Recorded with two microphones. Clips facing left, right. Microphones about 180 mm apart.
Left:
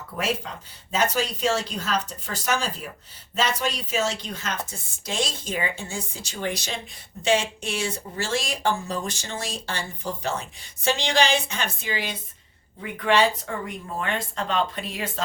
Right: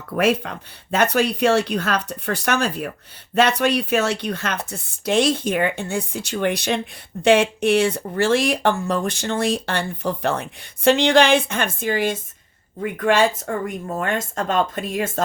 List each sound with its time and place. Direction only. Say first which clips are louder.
0.2 s speech: right 9 dB; 65° right (ahead or behind); by 15.2 s 45° right (ahead or behind)